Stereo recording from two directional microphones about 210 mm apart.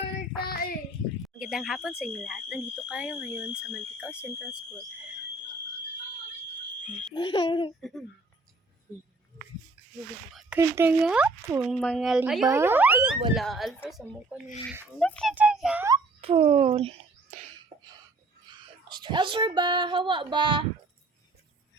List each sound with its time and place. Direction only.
0.4 s child singing: 45° left (ahead or behind)
1.2 s speech: centre (ahead or behind)
7.1 s a child's voice: 25° left (ahead or behind)
7.8 s speech: centre (ahead or behind)
10.6 s speech: 10° right (ahead or behind)
11.7 s speech: centre (ahead or behind)
16.2 s speech: 30° right (ahead or behind)
17.7 s a sound: 35° right (ahead or behind)
18.4 s speech: 20° right (ahead or behind)